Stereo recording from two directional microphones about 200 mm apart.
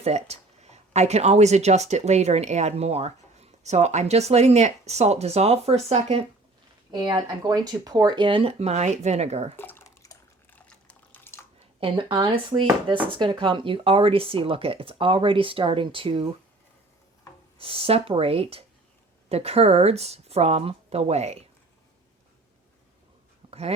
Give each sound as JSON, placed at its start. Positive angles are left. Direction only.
{"t": 0.0, "sound": "speech", "side_deg": -35}
{"t": 9.6, "sound": "bathtub", "side_deg": 10}
{"t": 10.7, "sound": "drip", "side_deg": 5}
{"t": 11.8, "sound": "speech", "side_deg": -25}
{"t": 17.6, "sound": "speech", "side_deg": -30}
{"t": 23.5, "sound": "a sound", "side_deg": -30}